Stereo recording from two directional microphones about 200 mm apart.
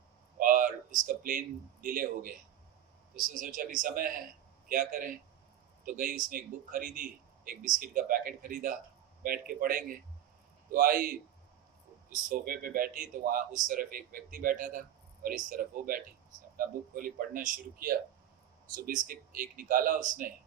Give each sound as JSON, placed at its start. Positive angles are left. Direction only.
{"t": 0.3, "sound": "speech", "side_deg": -45}